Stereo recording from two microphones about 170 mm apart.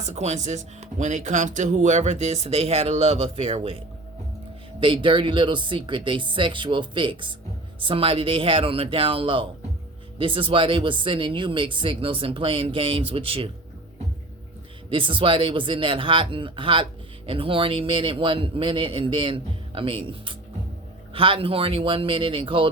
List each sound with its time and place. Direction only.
0.0 s speech: 40° right (ahead or behind)
14.8 s speech: 30° right (ahead or behind)